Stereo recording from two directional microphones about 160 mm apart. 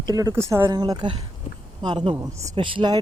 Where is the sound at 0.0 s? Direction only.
25° right (ahead or behind).